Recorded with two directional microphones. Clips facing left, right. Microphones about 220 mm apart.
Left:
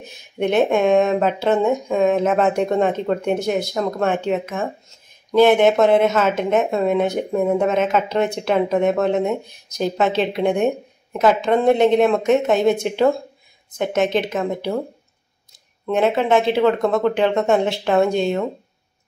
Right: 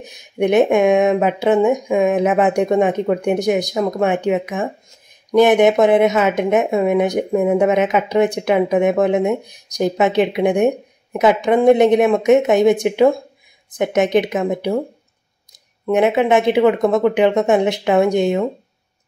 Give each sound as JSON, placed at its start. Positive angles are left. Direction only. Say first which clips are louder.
{"t": 0.0, "sound": "a woman's voice", "louder": "right 4 dB", "side_deg": -15}
{"t": 15.9, "sound": "a woman's voice", "louder": "right 3 dB", "side_deg": -15}